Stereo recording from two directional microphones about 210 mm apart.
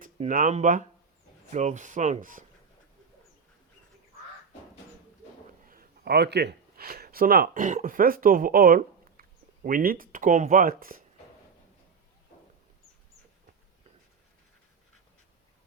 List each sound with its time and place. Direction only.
0.0 s speech: 35° right (ahead or behind)
5.6 s speech: 45° right (ahead or behind)